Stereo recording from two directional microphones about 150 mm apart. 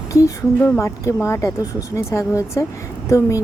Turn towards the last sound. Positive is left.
turn(degrees=20)  # may be behind; listen again after turning